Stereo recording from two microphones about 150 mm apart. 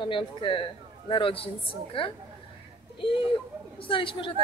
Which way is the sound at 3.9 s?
35° left (ahead or behind).